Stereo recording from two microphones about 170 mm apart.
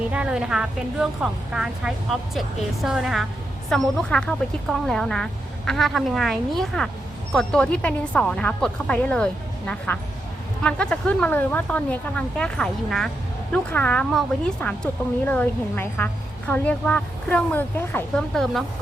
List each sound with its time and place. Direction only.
0.1 s a woman's voice: 5° right (ahead or behind); by 18.4 s 10° left (ahead or behind)